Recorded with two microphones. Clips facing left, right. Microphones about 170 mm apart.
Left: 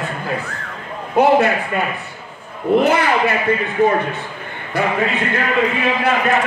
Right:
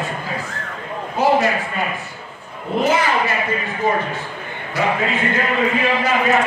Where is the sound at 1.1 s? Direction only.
60° left (ahead or behind).